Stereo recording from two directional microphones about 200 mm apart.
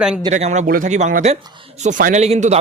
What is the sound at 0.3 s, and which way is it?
A man's voice, 35° right (ahead or behind).